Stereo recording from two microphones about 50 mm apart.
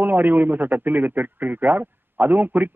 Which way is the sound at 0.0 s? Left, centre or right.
Right.